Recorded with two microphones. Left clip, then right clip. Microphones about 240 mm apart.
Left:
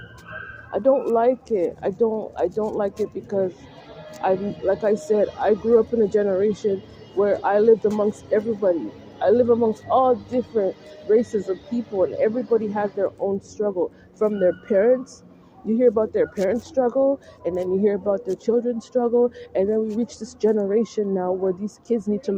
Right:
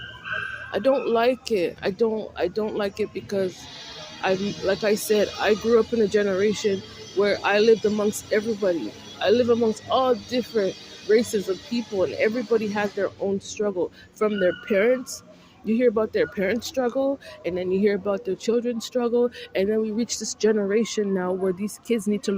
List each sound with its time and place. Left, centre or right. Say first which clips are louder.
0.7 s speech: left 3 dB; right
21.6 s speech: left 1 dB; right